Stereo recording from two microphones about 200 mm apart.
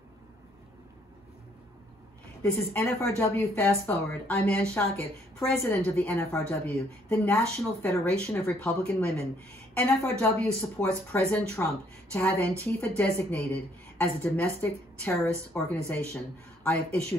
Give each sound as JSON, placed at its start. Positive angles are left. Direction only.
{"t": 2.5, "sound": "speech", "side_deg": 10}